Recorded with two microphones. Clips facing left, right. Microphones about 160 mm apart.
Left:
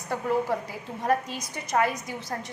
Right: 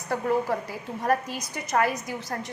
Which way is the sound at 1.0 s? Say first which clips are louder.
Even; 20° left (ahead or behind).